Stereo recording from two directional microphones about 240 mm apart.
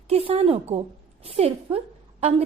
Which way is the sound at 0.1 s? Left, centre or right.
Right.